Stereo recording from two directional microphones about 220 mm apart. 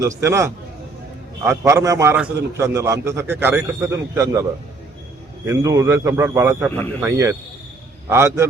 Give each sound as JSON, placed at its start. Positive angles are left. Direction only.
{"t": 0.2, "sound": "a man's voice", "side_deg": -15}
{"t": 5.5, "sound": "a man's voice", "side_deg": -15}